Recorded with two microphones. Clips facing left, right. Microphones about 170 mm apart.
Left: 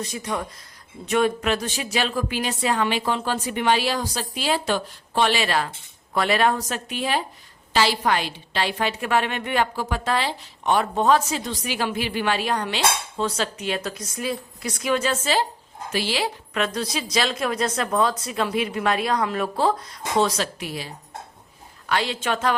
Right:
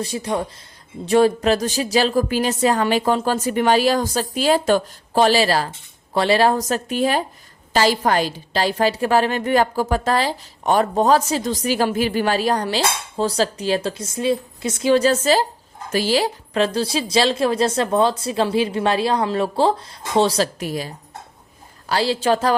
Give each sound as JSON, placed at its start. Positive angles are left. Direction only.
{"t": 0.0, "sound": "a woman's voice", "side_deg": -30}